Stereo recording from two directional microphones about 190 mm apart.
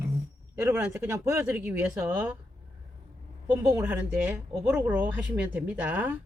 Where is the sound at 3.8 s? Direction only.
10° right (ahead or behind).